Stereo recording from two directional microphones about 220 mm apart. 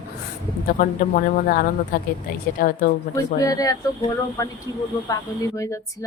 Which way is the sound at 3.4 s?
15° left (ahead or behind).